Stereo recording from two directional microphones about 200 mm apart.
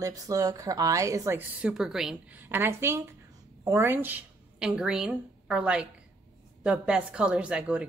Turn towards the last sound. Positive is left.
turn(degrees=-5)  # may be behind; listen again after turning